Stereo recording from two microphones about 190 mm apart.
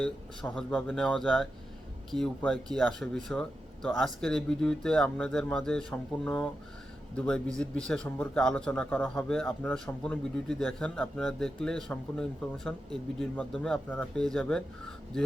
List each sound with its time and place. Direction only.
0.0 s a man's voice: 5° left (ahead or behind)